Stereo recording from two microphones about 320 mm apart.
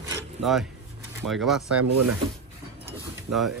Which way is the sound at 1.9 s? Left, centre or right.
Right.